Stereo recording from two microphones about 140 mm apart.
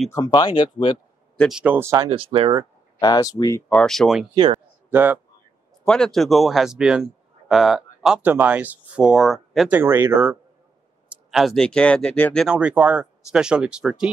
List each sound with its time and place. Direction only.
0.1 s speech: 30° left (ahead or behind)
1.5 s speech: 10° right (ahead or behind)
2.0 s speech: 40° right (ahead or behind)
3.0 s speech: 30° left (ahead or behind)
3.6 s a man's voice: 5° left (ahead or behind)
4.9 s speech: 15° right (ahead or behind)
5.9 s a man's voice: 5° left (ahead or behind)
9.7 s speech: 15° right (ahead or behind)
11.1 s speech: centre (ahead or behind)
12.4 s speech: 10° right (ahead or behind)